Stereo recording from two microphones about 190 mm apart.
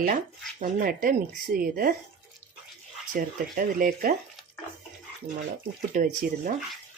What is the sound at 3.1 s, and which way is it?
Speech, 45° right (ahead or behind).